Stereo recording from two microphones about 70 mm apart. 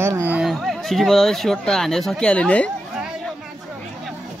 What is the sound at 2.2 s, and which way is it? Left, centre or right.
Speech, centre.